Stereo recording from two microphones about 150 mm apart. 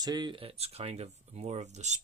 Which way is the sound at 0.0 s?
25° right (ahead or behind).